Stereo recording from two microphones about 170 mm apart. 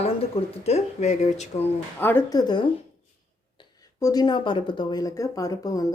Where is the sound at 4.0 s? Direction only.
20° left (ahead or behind).